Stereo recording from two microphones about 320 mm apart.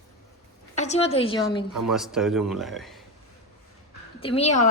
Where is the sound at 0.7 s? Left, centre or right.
Left.